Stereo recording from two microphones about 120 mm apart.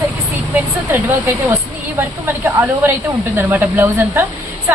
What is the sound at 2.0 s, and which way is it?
A woman's voice, 15° right (ahead or behind).